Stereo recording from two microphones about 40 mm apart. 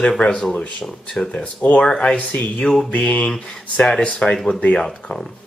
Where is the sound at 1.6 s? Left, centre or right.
Left.